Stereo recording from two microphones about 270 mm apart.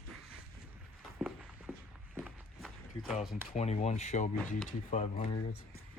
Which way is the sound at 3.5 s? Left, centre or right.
Left.